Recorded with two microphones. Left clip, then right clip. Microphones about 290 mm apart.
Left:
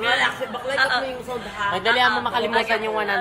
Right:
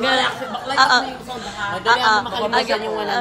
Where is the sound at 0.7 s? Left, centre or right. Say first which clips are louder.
Right 6 dB; centre.